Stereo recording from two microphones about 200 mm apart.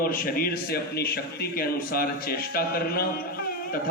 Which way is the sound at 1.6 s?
50° left (ahead or behind).